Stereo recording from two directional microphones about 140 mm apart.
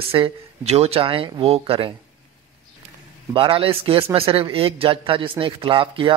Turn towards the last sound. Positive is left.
turn(degrees=-35)  # may be behind; listen again after turning